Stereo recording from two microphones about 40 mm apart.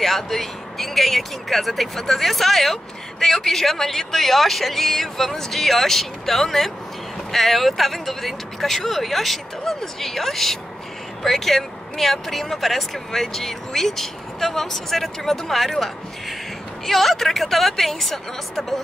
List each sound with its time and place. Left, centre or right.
0.0 s speech: centre